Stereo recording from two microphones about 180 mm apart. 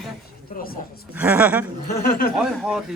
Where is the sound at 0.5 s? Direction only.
55° left (ahead or behind).